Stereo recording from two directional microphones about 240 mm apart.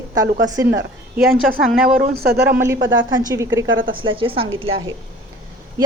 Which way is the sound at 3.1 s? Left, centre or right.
Centre.